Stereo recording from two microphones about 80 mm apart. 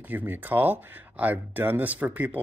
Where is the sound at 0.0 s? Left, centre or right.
Right.